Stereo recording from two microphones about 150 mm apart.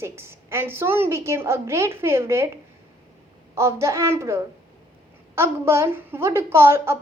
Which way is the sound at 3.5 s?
20° right (ahead or behind).